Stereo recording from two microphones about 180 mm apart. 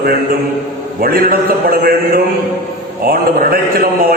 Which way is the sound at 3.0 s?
55° right (ahead or behind).